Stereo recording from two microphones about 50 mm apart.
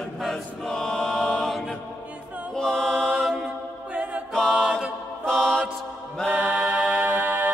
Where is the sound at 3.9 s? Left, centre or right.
Right.